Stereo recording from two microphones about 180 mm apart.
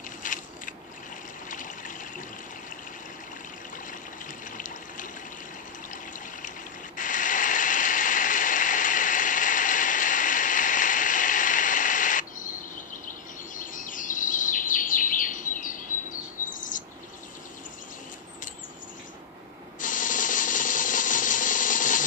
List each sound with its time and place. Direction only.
0.2 s biting: 45° left (ahead or behind)
1.5 s trickle: 45° left (ahead or behind)
4.5 s water: 45° left (ahead or behind)
7.0 s a sound: 45° left (ahead or behind)
13.6 s bird vocalization: 45° left (ahead or behind)
19.8 s tools: 45° left (ahead or behind)